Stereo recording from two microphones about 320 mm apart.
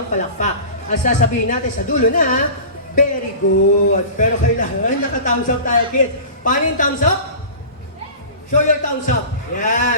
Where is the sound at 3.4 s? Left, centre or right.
Left.